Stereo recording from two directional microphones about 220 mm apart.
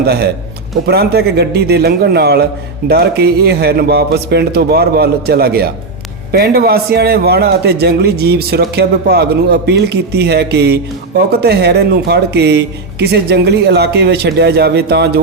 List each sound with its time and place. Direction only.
0.0 s a man's voice: 45° right (ahead or behind)